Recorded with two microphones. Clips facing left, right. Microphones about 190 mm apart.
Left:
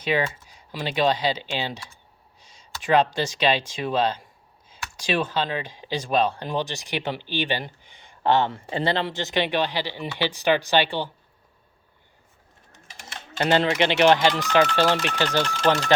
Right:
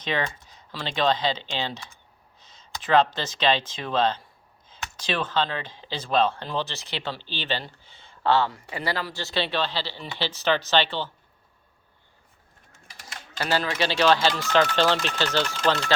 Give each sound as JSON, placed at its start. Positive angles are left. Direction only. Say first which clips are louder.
{"t": 0.4, "sound": "speech", "louder": "left 4 dB", "side_deg": 15}
{"t": 2.4, "sound": "a sound", "louder": "even", "side_deg": 10}
{"t": 2.8, "sound": "speech", "louder": "left 1 dB", "side_deg": 15}
{"t": 12.7, "sound": "speech", "louder": "left 2 dB", "side_deg": 25}